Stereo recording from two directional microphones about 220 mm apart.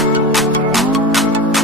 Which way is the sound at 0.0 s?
Centre (ahead or behind).